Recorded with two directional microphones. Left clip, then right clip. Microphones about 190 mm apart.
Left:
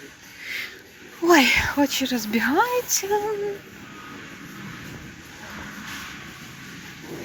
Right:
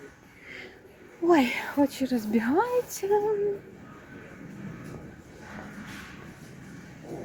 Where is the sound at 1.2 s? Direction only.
10° right (ahead or behind).